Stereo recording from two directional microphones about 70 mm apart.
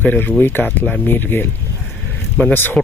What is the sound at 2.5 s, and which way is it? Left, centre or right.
Speech, left.